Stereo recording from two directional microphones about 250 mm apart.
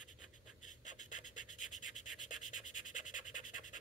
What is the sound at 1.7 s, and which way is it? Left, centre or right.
Rub, left.